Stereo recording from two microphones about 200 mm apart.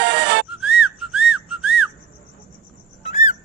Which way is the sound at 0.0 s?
60° right (ahead or behind).